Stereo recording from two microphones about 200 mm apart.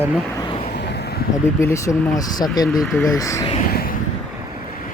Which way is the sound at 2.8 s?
10° left (ahead or behind).